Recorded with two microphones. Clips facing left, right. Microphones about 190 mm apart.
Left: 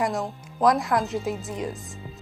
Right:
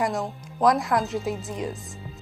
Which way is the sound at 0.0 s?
Centre (ahead or behind).